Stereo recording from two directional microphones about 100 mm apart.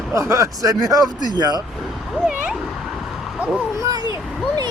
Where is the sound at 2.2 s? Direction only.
5° right (ahead or behind).